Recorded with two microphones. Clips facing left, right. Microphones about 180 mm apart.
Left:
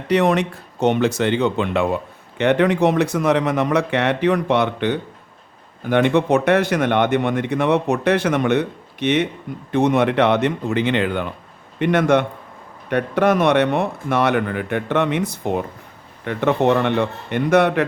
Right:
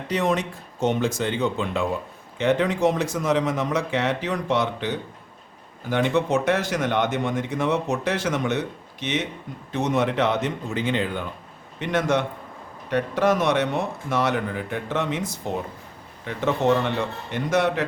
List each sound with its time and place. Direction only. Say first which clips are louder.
0.1 s speech: left 7 dB; 70° left (ahead or behind)